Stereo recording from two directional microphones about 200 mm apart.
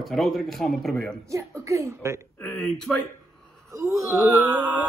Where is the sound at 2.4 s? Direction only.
5° left (ahead or behind).